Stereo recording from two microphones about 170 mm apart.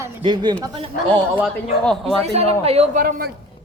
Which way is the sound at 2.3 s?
35° right (ahead or behind).